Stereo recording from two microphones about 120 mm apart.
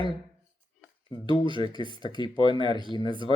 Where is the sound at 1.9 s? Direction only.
40° left (ahead or behind).